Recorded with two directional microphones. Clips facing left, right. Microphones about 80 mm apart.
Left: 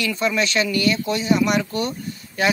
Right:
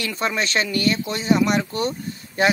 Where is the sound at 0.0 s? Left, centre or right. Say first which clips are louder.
Left 3 dB; right.